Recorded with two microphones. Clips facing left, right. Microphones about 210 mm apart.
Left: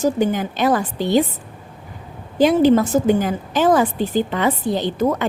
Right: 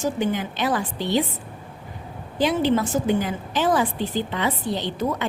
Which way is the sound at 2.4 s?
45° left (ahead or behind).